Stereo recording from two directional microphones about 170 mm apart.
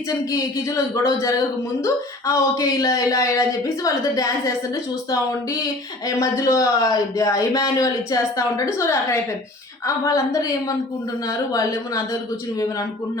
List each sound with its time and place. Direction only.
0.1 s speech: 20° left (ahead or behind)
6.1 s speech: 20° left (ahead or behind)